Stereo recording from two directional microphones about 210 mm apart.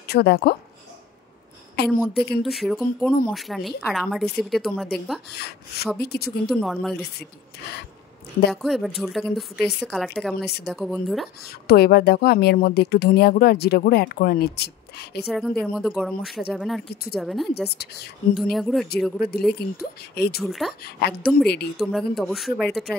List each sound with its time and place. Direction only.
0.0 s speech: 50° left (ahead or behind)
1.9 s a woman's voice: 5° left (ahead or behind)
5.3 s a woman's voice: 50° left (ahead or behind)
6.5 s a woman's voice: centre (ahead or behind)
8.5 s a woman's voice: centre (ahead or behind)
11.4 s a woman's voice: 50° left (ahead or behind)
15.2 s a woman's voice: centre (ahead or behind)
17.7 s a woman's voice: 50° left (ahead or behind)
18.3 s a woman's voice: centre (ahead or behind)
19.6 s a woman's voice: 50° left (ahead or behind)
20.3 s a woman's voice: centre (ahead or behind)
20.8 s a woman's voice: 50° left (ahead or behind)
21.7 s a woman's voice: centre (ahead or behind)